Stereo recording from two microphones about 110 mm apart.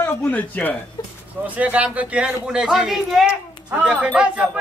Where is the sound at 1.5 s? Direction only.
10° right (ahead or behind).